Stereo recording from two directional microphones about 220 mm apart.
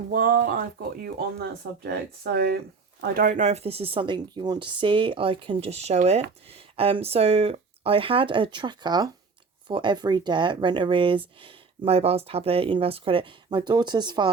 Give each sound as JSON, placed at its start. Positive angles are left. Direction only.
{"t": 0.1, "sound": "speech", "side_deg": -40}